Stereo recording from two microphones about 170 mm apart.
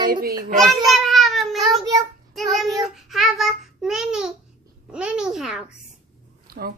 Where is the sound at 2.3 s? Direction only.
Centre (ahead or behind).